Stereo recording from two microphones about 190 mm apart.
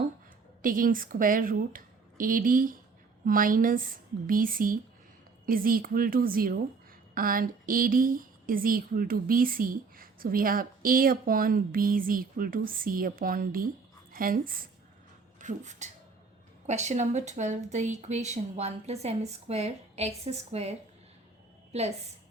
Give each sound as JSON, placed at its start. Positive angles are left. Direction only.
{"t": 0.6, "sound": "a woman's voice", "side_deg": -45}